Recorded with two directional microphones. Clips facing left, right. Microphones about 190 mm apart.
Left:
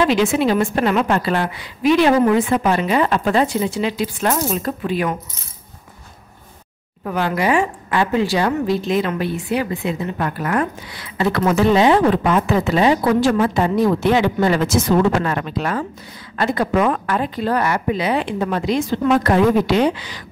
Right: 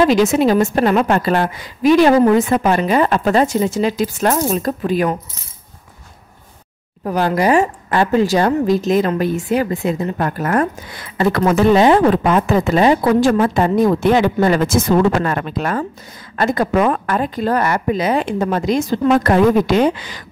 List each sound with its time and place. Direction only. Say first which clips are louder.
0.0 s a woman's voice: right 3 dB; 40° right (ahead or behind)
7.1 s a woman's voice: right 4 dB; 40° right (ahead or behind)